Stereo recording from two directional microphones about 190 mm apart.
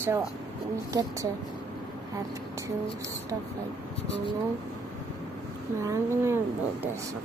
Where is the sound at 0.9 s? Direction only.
20° right (ahead or behind).